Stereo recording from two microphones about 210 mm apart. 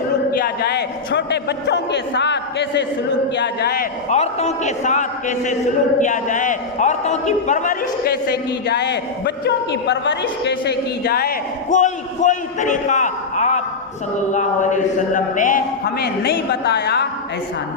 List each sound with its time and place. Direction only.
0.3 s a man's voice: 45° left (ahead or behind)
4.1 s a man's voice: 30° left (ahead or behind); by 17.1 s 50° left (ahead or behind)